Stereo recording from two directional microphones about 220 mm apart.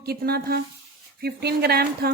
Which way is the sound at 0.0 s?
45° right (ahead or behind).